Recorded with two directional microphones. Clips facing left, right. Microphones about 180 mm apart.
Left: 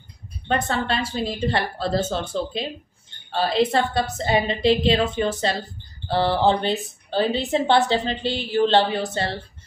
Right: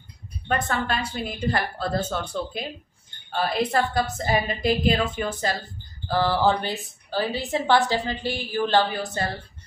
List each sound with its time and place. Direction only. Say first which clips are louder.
0.5 s a woman's voice: left 2 dB; 30° left (ahead or behind)
3.3 s a woman's voice: left 4 dB; 30° left (ahead or behind)